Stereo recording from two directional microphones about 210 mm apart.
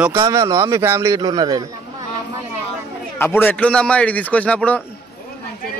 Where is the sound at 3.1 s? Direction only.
10° left (ahead or behind).